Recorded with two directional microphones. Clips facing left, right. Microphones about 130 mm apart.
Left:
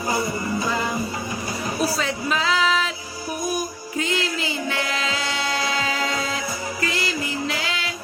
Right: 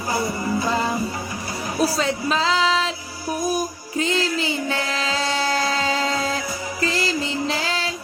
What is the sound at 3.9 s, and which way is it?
Music, 30° right (ahead or behind).